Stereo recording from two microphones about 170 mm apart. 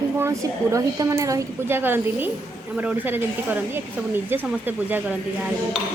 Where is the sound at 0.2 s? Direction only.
20° right (ahead or behind).